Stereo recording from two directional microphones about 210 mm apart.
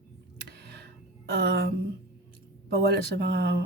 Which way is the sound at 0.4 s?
55° right (ahead or behind).